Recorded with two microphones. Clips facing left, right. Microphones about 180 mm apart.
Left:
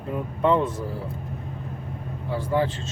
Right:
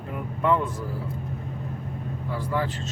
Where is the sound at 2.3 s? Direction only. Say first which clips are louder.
Left 4 dB; 25° left (ahead or behind).